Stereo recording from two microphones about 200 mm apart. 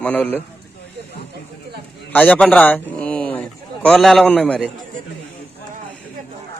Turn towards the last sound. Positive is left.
turn(degrees=5)  # may be behind; listen again after turning